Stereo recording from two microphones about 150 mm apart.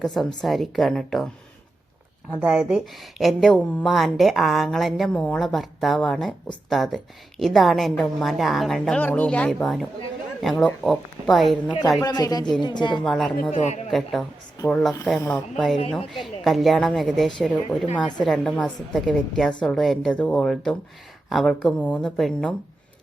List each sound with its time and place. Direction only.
0.0 s a woman's voice: 5° left (ahead or behind)
2.3 s a woman's voice: 10° right (ahead or behind)
12.0 s a woman's voice: 25° left (ahead or behind)
13.0 s a woman's voice: centre (ahead or behind)
13.5 s speech: 50° left (ahead or behind)
13.9 s a woman's voice: centre (ahead or behind)